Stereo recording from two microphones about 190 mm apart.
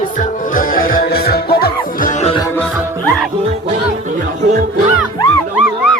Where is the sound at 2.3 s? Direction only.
15° left (ahead or behind).